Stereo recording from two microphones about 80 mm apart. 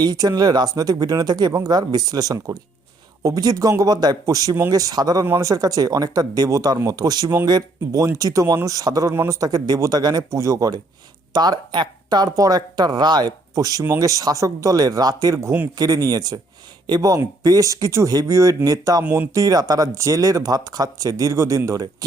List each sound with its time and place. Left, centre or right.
0.0 s speech: right
8.0 s speech: right
9.1 s a man's voice: right
9.6 s speech: right
10.3 s speech: right
11.3 s speech: right
13.6 s speech: right
17.4 s speech: right